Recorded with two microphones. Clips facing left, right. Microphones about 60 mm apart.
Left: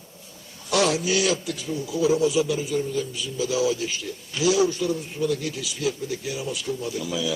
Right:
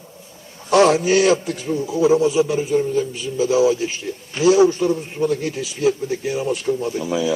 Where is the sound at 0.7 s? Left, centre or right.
Right.